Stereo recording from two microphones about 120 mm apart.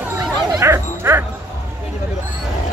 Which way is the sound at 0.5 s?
25° right (ahead or behind).